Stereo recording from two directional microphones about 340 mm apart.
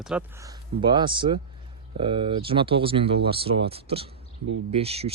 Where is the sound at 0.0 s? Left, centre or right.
Centre.